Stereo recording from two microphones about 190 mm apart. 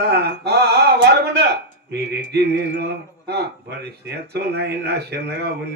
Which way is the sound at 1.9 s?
60° right (ahead or behind).